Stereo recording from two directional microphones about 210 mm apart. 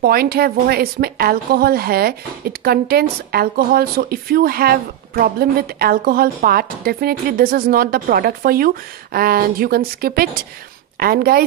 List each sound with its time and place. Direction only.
0.0 s a woman's voice: 45° right (ahead or behind)